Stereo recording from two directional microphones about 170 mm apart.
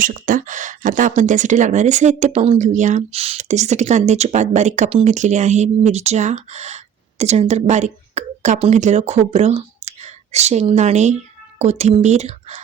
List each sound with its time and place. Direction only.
0.0 s speech: 50° right (ahead or behind)